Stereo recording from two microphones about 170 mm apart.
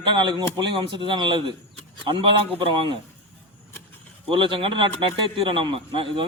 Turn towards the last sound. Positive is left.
turn(degrees=-30)  # may be behind; listen again after turning